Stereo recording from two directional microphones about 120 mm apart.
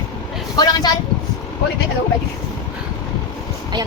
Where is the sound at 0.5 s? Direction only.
35° left (ahead or behind).